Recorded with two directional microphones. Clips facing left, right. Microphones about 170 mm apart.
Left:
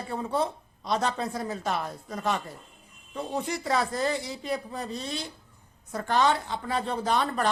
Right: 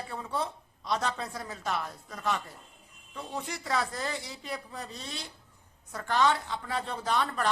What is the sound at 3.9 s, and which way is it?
A woman's voice, 25° left (ahead or behind).